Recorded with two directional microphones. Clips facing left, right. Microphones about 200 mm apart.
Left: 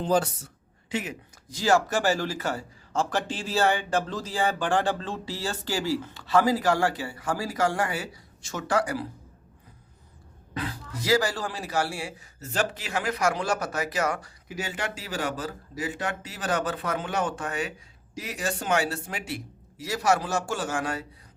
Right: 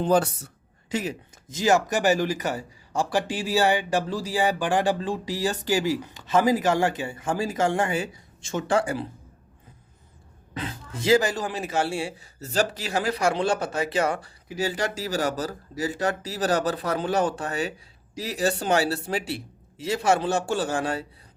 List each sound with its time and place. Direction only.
0.0 s speech: 60° right (ahead or behind)
0.9 s speech: 40° right (ahead or behind)
1.5 s speech: 20° right (ahead or behind)
10.6 s speech: 25° right (ahead or behind)